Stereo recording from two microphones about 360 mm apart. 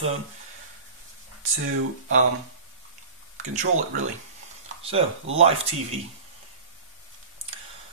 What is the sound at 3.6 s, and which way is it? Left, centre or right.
Speech, right.